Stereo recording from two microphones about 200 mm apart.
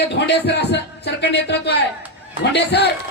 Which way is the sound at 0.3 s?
55° left (ahead or behind).